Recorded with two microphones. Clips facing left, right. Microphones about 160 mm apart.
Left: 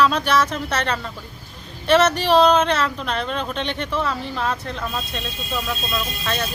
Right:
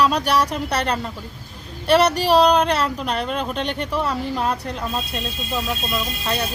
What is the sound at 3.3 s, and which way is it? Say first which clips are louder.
Speech: right 1 dB; 5° right (ahead or behind).